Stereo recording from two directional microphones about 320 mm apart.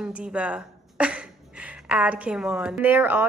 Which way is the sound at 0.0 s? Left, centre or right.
Centre.